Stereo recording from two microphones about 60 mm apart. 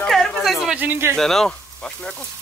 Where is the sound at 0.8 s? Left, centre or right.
Right.